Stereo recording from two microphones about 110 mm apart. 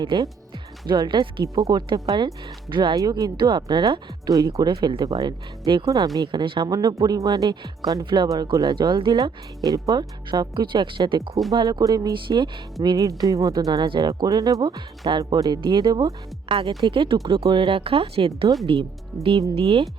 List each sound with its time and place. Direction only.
0.0 s speech: 45° right (ahead or behind)
1.6 s speech: 35° right (ahead or behind)
6.7 s speech: 35° right (ahead or behind)
12.1 s speech: 50° right (ahead or behind)
12.8 s speech: 35° right (ahead or behind)
16.5 s speech: 50° right (ahead or behind)